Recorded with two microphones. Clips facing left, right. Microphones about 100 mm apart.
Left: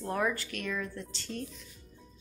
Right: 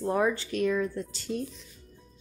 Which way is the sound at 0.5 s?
35° right (ahead or behind).